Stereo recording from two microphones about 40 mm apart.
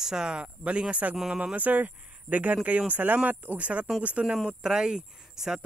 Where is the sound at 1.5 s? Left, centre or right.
Right.